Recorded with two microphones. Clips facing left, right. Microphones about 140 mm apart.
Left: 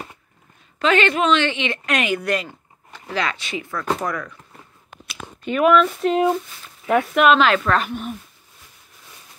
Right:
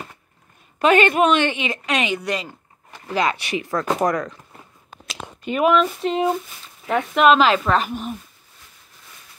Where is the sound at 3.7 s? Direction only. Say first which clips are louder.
Right 7 dB; 40° right (ahead or behind).